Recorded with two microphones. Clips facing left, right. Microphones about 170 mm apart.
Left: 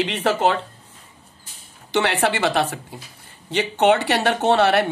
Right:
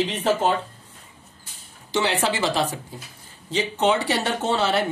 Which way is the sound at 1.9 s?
65° left (ahead or behind).